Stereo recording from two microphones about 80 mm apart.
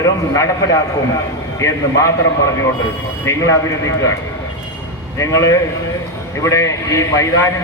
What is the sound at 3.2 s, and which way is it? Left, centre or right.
Speech, left.